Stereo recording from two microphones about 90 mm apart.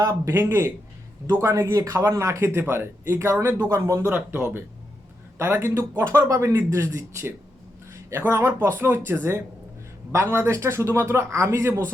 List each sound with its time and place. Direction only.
0.0 s speech: 35° right (ahead or behind)
4.1 s speech: 20° right (ahead or behind)
6.1 s speech: 40° right (ahead or behind)